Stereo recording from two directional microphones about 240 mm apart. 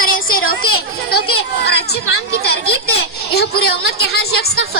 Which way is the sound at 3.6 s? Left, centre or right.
Left.